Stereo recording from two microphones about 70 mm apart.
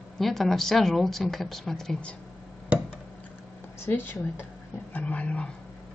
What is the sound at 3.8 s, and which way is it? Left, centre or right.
A woman's voice, left.